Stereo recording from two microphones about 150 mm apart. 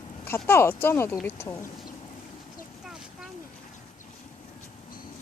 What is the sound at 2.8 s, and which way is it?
Vehicle, 5° right (ahead or behind).